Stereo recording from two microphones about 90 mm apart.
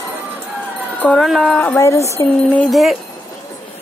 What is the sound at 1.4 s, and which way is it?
Speech, 15° left (ahead or behind).